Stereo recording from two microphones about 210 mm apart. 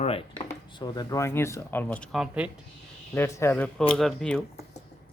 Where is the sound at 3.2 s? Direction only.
15° left (ahead or behind).